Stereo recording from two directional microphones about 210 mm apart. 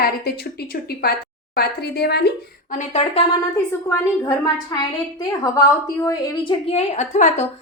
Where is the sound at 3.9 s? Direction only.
15° left (ahead or behind).